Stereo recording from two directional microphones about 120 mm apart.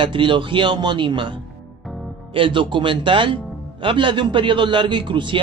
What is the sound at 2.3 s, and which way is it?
Speech, 45° right (ahead or behind).